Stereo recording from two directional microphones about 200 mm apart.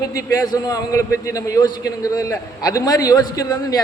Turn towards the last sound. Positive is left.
turn(degrees=20)  # may be behind; listen again after turning